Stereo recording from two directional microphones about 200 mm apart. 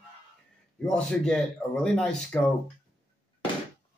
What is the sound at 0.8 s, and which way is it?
Speech, 5° left (ahead or behind).